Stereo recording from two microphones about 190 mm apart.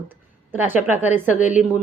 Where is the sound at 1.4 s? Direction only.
40° left (ahead or behind).